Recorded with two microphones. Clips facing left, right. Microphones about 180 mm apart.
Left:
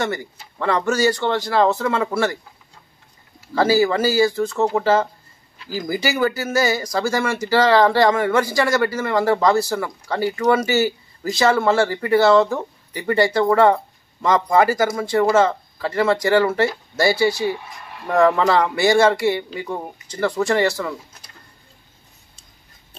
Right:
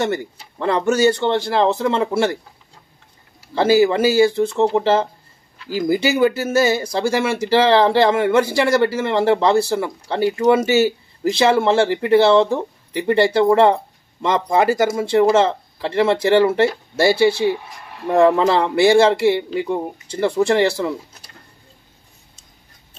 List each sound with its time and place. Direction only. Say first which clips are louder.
0.7 s speech: right 3 dB; 25° right (ahead or behind)
3.5 s speech: right 2 dB; 25° right (ahead or behind)